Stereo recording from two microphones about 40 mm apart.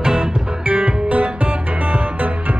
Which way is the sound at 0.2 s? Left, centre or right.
Right.